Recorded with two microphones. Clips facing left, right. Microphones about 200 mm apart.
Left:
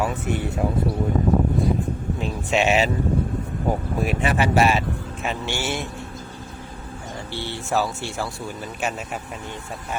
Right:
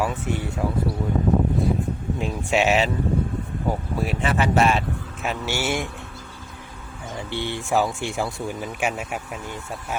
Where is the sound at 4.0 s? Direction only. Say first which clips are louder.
Left 1 dB; 15° left (ahead or behind); by 5.9 s 10° right (ahead or behind).